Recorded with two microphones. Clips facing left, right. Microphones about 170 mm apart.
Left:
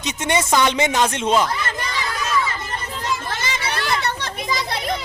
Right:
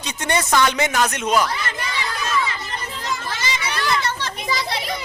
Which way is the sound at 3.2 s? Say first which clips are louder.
Even; 55° left (ahead or behind).